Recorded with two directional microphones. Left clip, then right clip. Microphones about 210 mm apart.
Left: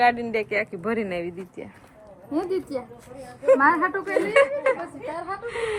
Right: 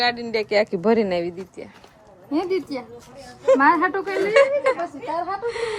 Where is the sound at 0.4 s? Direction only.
25° right (ahead or behind).